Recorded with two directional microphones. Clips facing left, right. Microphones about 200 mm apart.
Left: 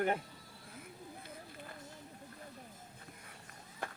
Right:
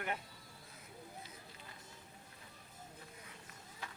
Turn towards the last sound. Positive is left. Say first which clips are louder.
# left 6 dB
turn(degrees=55)  # may be behind; listen again after turning